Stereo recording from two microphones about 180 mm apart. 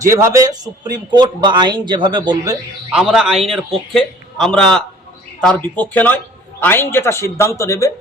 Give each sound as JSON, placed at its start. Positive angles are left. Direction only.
{"t": 0.0, "sound": "a man's voice", "side_deg": -15}
{"t": 2.9, "sound": "a man's voice", "side_deg": -5}